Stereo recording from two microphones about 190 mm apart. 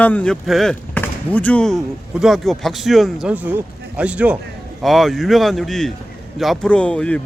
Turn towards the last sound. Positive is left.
turn(degrees=5)  # may be behind; listen again after turning